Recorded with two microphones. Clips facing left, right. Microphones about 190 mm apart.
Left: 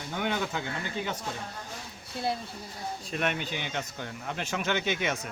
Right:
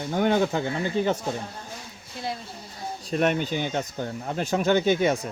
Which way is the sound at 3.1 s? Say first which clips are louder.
Right 8 dB; 40° right (ahead or behind).